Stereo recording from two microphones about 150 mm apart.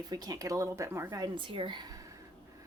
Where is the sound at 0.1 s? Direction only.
25° right (ahead or behind).